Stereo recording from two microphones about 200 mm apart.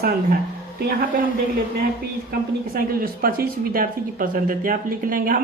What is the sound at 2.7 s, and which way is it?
Speech, 45° right (ahead or behind).